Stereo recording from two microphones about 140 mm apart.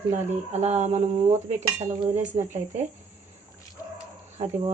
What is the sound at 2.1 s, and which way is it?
Speech, 55° right (ahead or behind).